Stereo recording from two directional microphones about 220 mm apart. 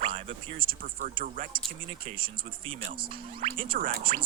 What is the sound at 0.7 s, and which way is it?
Speech, 40° right (ahead or behind).